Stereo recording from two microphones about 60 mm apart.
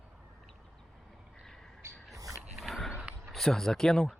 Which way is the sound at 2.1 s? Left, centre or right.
Right.